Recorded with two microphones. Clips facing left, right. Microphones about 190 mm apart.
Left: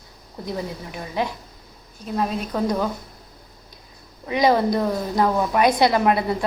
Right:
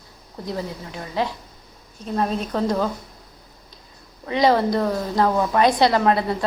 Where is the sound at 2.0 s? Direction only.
5° left (ahead or behind).